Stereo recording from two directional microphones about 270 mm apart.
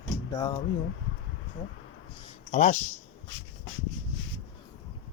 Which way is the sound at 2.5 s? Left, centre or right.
Left.